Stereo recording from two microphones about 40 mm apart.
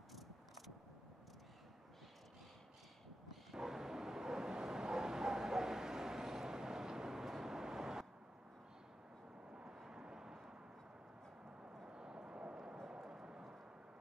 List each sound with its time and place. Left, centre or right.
3.3 s a sound: centre
9.5 s vehicle: right
11.9 s vehicle: centre